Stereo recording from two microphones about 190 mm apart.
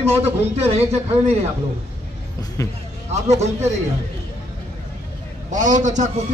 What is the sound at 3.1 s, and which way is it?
Speech, 35° right (ahead or behind).